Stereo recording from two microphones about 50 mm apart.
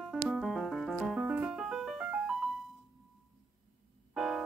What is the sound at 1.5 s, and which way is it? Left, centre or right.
Music, centre.